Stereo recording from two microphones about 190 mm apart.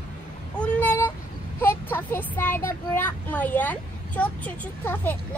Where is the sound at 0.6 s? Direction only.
10° left (ahead or behind).